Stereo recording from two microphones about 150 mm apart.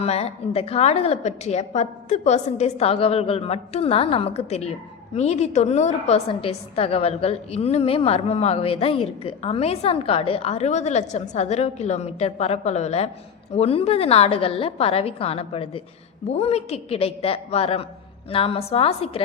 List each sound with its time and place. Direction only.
0.0 s a woman's voice: 45° left (ahead or behind)